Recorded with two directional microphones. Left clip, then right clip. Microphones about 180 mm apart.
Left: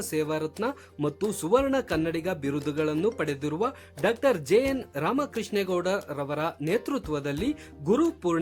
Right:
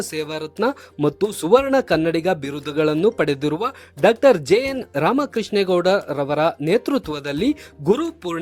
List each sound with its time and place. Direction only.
0.0 s speech: 35° right (ahead or behind)